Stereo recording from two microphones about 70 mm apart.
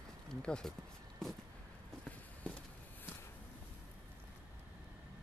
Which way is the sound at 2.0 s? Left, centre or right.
Centre.